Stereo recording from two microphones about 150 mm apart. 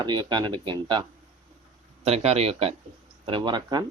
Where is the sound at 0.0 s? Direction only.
30° right (ahead or behind).